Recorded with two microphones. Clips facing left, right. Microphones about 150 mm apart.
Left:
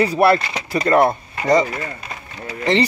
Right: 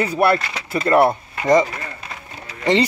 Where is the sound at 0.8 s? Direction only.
10° right (ahead or behind).